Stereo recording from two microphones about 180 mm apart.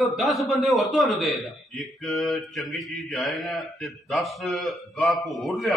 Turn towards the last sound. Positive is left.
turn(degrees=0)  # may be behind; listen again after turning